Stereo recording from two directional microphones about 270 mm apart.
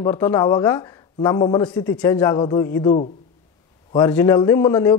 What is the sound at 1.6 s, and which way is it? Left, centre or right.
A man's voice, centre.